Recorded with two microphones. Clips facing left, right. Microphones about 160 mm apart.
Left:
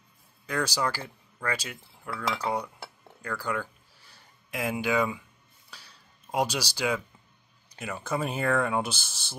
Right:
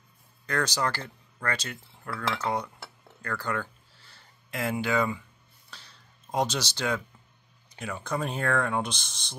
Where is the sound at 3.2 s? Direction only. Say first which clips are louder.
Even; 10° left (ahead or behind).